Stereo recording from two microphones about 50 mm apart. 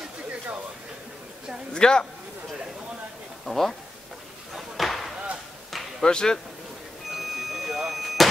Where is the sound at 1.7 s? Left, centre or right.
Centre.